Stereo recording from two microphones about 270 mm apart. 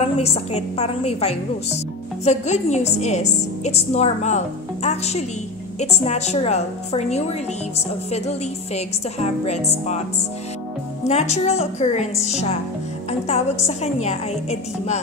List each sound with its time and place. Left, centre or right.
0.0 s a woman's voice: left
11.1 s a woman's voice: left
14.0 s a woman's voice: left